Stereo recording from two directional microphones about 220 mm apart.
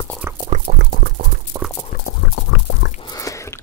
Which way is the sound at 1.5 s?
15° right (ahead or behind).